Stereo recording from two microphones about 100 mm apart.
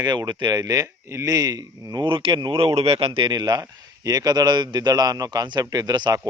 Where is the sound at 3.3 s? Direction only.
40° right (ahead or behind).